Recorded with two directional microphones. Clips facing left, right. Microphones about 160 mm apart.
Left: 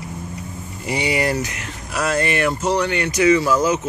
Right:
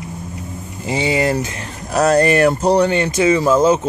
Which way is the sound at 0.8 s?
25° right (ahead or behind).